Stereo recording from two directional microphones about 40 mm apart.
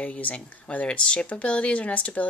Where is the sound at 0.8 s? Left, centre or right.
Left.